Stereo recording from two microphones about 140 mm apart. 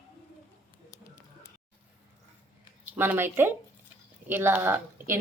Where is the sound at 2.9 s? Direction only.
15° right (ahead or behind).